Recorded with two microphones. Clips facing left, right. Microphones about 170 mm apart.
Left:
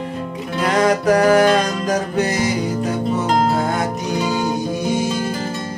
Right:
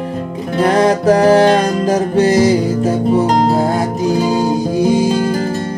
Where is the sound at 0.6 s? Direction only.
30° right (ahead or behind).